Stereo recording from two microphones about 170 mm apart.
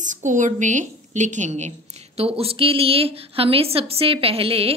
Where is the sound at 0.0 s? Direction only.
45° right (ahead or behind).